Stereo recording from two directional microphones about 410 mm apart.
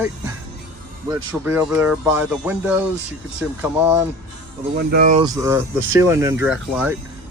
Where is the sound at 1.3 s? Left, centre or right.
Centre.